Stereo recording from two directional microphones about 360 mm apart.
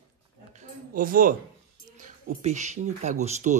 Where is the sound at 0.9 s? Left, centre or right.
Right.